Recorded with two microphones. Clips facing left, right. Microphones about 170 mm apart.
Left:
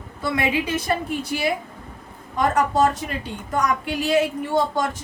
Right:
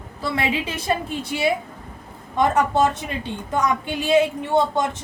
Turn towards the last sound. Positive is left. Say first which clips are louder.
# right 2 dB
turn(degrees=-20)  # may be behind; listen again after turning